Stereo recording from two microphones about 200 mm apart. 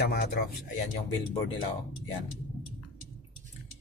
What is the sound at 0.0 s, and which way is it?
Speech, 50° left (ahead or behind).